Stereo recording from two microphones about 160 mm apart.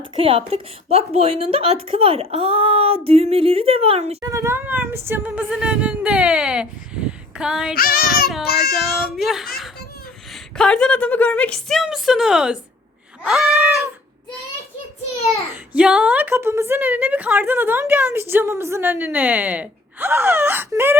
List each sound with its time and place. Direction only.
0.2 s a woman's voice: 35° right (ahead or behind)
4.2 s a woman's voice: 15° right (ahead or behind)
7.8 s child singing: 65° left (ahead or behind)
8.7 s a woman's voice: centre (ahead or behind)
15.7 s a woman's voice: 5° right (ahead or behind)